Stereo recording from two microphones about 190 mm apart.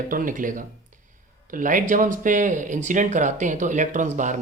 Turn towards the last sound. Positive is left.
turn(degrees=-40)  # may be behind; listen again after turning